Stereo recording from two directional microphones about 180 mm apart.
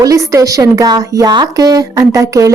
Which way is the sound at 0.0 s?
20° right (ahead or behind).